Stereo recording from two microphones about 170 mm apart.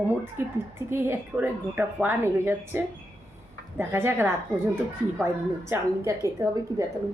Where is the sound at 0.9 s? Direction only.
15° right (ahead or behind).